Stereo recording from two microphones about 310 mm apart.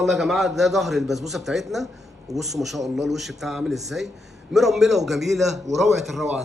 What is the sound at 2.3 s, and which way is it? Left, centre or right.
Speech, right.